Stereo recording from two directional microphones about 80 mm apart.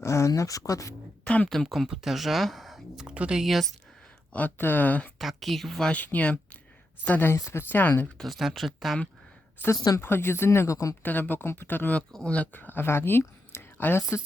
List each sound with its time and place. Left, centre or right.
0.0 s speech: left
1.2 s speech: centre
1.5 s speech: centre
3.4 s speech: centre
4.3 s speech: centre
5.2 s speech: centre
5.9 s speech: centre
7.3 s speech: left
7.7 s speech: left
8.2 s speech: centre
10.0 s speech: left
11.0 s speech: left
12.1 s speech: centre; by 14.2 s left